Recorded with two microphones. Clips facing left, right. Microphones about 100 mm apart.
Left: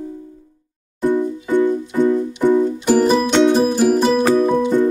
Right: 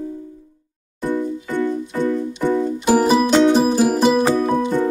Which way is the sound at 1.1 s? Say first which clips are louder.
Left 4 dB; 15° left (ahead or behind).